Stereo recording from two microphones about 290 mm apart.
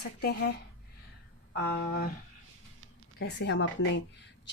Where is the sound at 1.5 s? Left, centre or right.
Left.